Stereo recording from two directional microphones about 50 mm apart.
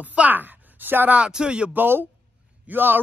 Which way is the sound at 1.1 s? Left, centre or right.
Centre.